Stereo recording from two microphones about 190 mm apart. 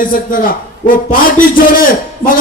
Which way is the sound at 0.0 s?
45° left (ahead or behind).